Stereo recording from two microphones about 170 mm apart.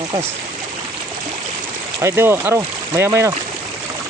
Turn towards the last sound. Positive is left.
turn(degrees=-15)  # may be behind; listen again after turning